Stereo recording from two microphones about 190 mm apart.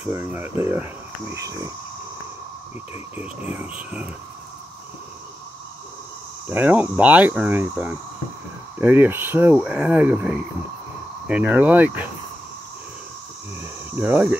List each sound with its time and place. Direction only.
0.0 s speech: 10° right (ahead or behind)
3.5 s speech: 5° right (ahead or behind)
6.5 s speech: 10° right (ahead or behind)
13.6 s speech: 10° right (ahead or behind)